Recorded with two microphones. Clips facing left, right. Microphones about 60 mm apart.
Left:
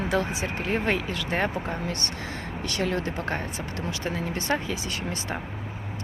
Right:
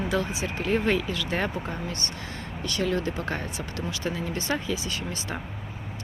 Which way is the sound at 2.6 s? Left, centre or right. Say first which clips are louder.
Right 1 dB; left.